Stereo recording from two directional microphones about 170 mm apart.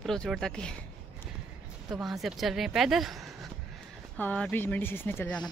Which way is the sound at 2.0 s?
Centre (ahead or behind).